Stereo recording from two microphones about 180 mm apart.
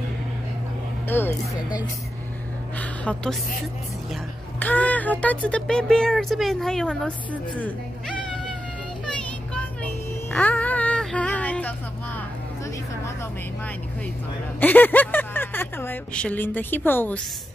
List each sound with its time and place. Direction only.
1.0 s music: 10° left (ahead or behind)
2.8 s a woman's voice: 5° left (ahead or behind)
4.6 s speech: 10° left (ahead or behind)
9.0 s child singing: 5° left (ahead or behind)
14.6 s speech: 10° left (ahead or behind)